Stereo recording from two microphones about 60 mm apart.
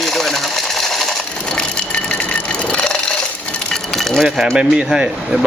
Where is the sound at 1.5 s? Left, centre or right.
Centre.